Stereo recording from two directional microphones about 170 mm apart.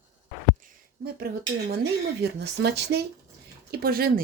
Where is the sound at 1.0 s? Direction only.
65° right (ahead or behind).